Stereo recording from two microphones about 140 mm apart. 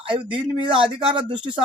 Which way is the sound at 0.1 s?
40° right (ahead or behind).